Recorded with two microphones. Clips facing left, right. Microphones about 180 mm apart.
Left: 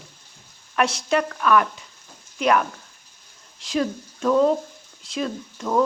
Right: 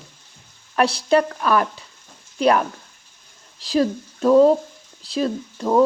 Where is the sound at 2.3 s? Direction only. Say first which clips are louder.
Right 3 dB; 35° right (ahead or behind).